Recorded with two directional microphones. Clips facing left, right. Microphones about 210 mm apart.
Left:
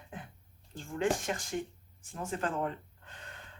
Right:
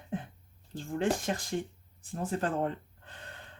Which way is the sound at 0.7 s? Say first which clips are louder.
Right 1 dB; 35° right (ahead or behind).